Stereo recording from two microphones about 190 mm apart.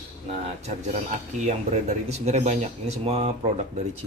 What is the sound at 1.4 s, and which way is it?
Speech, 35° right (ahead or behind).